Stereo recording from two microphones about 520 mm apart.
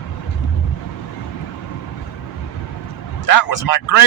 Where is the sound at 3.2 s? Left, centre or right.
Left.